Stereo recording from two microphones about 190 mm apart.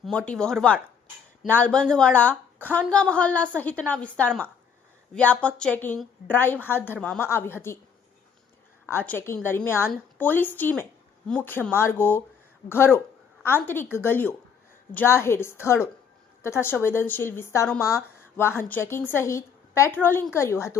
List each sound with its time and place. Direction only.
0.0 s a woman's voice: 5° left (ahead or behind)
8.9 s a woman's voice: 10° left (ahead or behind)